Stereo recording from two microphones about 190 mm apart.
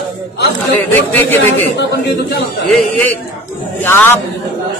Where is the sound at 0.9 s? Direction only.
10° left (ahead or behind).